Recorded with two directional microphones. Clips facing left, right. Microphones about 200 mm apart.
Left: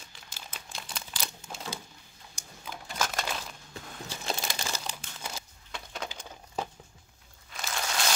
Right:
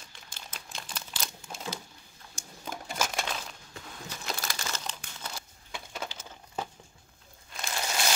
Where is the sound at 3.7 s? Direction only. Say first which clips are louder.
Left 4 dB; 30° left (ahead or behind).